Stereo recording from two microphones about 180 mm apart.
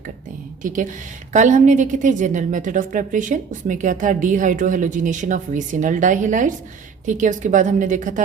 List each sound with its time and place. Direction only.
0.6 s a woman's voice: 45° right (ahead or behind)